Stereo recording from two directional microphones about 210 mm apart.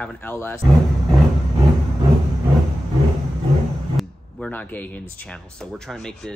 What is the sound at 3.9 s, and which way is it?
Speech, 5° left (ahead or behind).